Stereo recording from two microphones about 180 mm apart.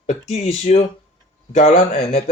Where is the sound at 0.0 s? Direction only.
40° left (ahead or behind).